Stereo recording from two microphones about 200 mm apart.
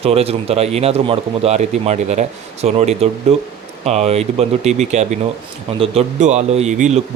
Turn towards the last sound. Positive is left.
turn(degrees=-35)  # may be behind; listen again after turning